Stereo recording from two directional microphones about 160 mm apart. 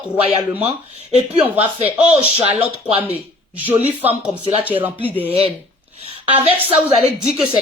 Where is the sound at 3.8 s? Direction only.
10° right (ahead or behind).